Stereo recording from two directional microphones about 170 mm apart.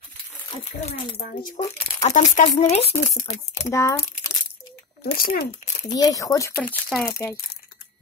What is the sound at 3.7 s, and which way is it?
Speech, 20° left (ahead or behind).